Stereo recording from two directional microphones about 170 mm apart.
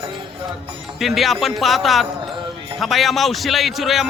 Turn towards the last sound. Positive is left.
turn(degrees=0)  # may be behind; listen again after turning